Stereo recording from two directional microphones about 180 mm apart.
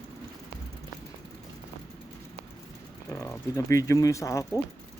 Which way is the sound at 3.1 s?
15° left (ahead or behind).